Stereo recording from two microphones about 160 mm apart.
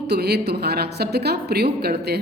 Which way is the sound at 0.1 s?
85° right.